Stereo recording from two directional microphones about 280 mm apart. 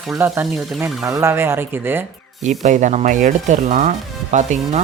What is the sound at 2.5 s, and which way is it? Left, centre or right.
Speech, right.